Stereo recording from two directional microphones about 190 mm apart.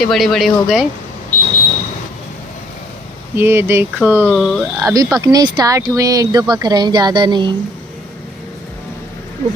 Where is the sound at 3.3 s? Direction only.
10° right (ahead or behind).